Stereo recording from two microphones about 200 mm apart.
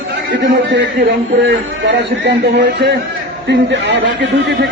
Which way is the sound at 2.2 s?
60° right (ahead or behind).